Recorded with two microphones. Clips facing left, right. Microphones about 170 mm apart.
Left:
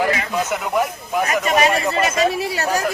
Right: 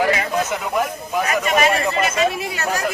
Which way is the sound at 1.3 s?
40° left (ahead or behind).